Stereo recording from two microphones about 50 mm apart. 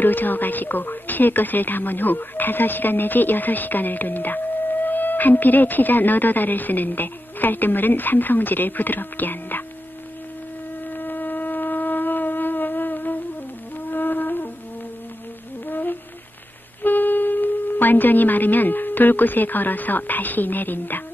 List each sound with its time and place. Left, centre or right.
0.0 s speech: left
10.9 s wind instrument: left
13.8 s music: left
15.6 s humming: left
16.8 s a woman's voice: left